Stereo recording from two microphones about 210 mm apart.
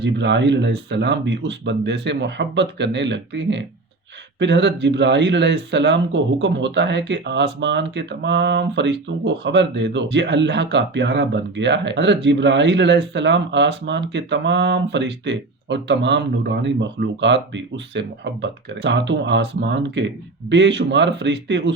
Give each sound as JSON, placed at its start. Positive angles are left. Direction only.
{"t": 0.0, "sound": "speech", "side_deg": -55}